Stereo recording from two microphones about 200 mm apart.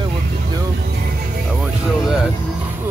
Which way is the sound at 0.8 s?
50° right (ahead or behind).